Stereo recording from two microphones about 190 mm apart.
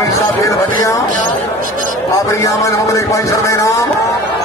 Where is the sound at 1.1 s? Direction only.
45° right (ahead or behind).